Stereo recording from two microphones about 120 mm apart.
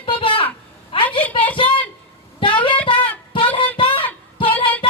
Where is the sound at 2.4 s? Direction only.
45° left (ahead or behind).